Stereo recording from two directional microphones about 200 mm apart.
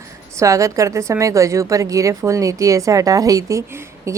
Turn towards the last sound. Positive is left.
turn(degrees=-15)  # may be behind; listen again after turning